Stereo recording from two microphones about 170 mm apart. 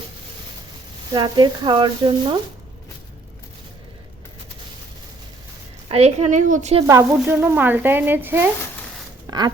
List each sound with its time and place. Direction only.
1.1 s speech: 25° right (ahead or behind)
5.9 s a woman's voice: 40° right (ahead or behind)
6.8 s speech: 15° right (ahead or behind)